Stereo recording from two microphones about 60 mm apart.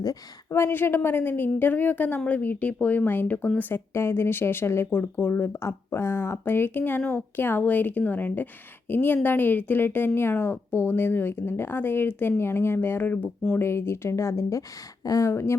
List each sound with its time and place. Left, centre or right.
0.5 s speech: left
3.9 s speech: left
4.9 s speech: left
15.0 s speech: left
15.3 s speech: left